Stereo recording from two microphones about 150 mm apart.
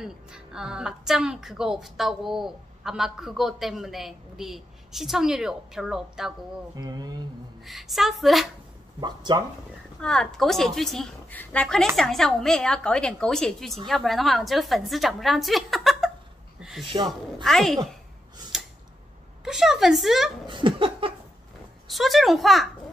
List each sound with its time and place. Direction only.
0.0 s a woman's voice: 5° right (ahead or behind)
6.7 s speech: 25° right (ahead or behind)
7.6 s a woman's voice: centre (ahead or behind)
9.0 s speech: 30° right (ahead or behind)
9.9 s a woman's voice: 5° left (ahead or behind)
16.9 s speech: 35° right (ahead or behind)
17.4 s a woman's voice: centre (ahead or behind)
19.4 s a woman's voice: centre (ahead or behind)
20.4 s laughter: 35° right (ahead or behind)
21.8 s a woman's voice: centre (ahead or behind)